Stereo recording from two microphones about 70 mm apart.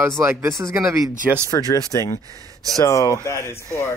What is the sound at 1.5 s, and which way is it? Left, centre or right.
Speech, left.